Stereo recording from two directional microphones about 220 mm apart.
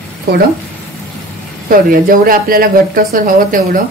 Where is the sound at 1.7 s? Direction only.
40° right (ahead or behind).